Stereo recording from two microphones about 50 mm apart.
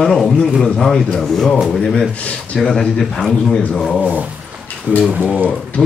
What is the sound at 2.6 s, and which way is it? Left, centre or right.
Speech, centre.